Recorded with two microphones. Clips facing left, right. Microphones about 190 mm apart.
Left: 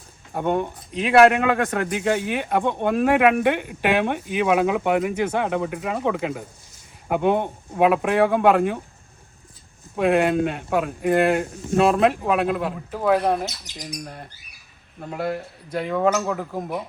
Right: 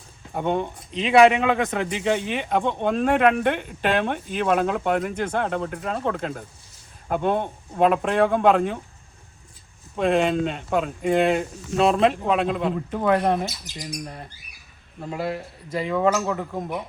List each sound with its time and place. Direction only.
0.3 s a man's voice: 5° left (ahead or behind)
9.9 s speech: 5° left (ahead or behind)
13.7 s a man's voice: 20° left (ahead or behind)
14.0 s speech: centre (ahead or behind)